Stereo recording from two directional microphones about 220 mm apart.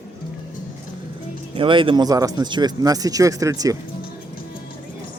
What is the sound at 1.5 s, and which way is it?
Speech, 25° right (ahead or behind).